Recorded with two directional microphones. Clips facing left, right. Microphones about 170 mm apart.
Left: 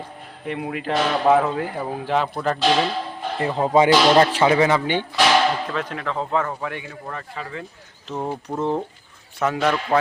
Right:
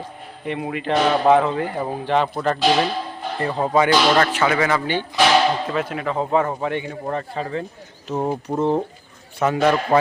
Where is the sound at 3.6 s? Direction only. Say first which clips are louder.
Left 2 dB; 20° left (ahead or behind).